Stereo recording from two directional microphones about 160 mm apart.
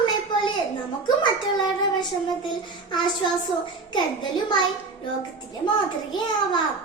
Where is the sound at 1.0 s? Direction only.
30° left (ahead or behind).